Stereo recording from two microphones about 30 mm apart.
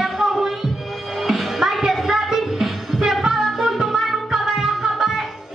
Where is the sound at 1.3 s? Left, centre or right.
Centre.